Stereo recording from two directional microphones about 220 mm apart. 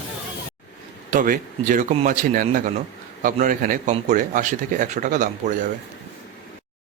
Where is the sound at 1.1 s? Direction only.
35° right (ahead or behind).